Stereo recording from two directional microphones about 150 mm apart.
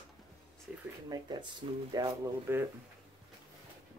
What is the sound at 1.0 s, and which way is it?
Speech, 30° right (ahead or behind).